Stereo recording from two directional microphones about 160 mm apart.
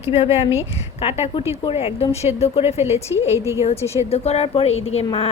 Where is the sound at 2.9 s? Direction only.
15° right (ahead or behind).